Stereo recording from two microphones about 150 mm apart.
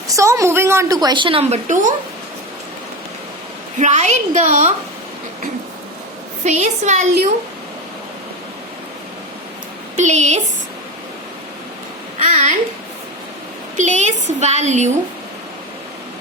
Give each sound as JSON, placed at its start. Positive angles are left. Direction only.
{"t": 0.1, "sound": "a woman's voice", "side_deg": -20}
{"t": 3.8, "sound": "a woman's voice", "side_deg": -50}
{"t": 6.4, "sound": "a woman's voice", "side_deg": -50}
{"t": 9.9, "sound": "a woman's voice", "side_deg": -50}
{"t": 12.2, "sound": "babbling", "side_deg": -55}
{"t": 13.7, "sound": "a woman's voice", "side_deg": -50}